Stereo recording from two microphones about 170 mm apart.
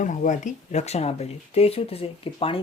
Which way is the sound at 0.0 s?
50° left (ahead or behind).